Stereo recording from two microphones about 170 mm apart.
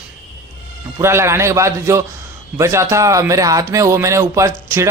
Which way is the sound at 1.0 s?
15° right (ahead or behind).